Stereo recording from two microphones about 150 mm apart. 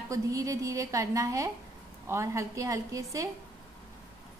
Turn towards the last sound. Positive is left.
turn(degrees=-20)  # may be behind; listen again after turning